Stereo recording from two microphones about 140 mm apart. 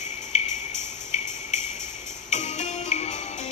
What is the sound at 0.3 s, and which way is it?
Music, 50° left (ahead or behind).